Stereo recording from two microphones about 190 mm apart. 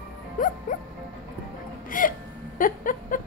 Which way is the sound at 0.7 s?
45° left (ahead or behind).